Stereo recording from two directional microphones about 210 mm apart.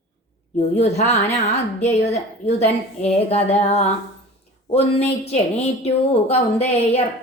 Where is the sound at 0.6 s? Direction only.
30° left (ahead or behind).